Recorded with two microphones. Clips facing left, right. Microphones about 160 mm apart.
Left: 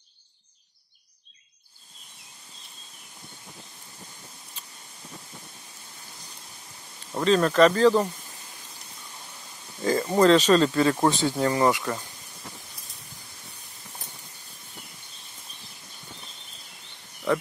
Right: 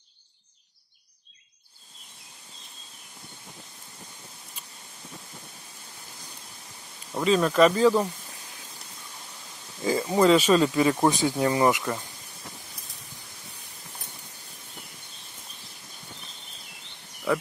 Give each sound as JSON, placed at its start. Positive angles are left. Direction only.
{"t": 7.2, "sound": "speech", "side_deg": -5}
{"t": 9.8, "sound": "speech", "side_deg": -5}
{"t": 17.3, "sound": "a sound", "side_deg": -5}